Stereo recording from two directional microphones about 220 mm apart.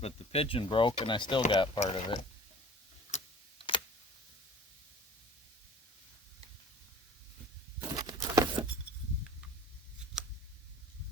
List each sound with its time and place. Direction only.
0.0 s speech: 25° left (ahead or behind)
3.1 s tick: 30° left (ahead or behind)
7.8 s a sound: 15° right (ahead or behind)